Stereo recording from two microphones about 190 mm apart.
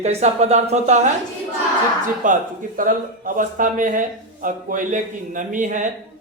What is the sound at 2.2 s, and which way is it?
A man's voice, 45° right (ahead or behind).